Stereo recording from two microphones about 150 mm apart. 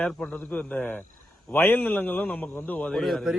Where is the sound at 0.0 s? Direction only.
5° left (ahead or behind).